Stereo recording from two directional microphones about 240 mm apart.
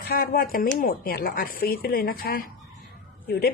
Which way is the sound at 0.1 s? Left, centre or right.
Left.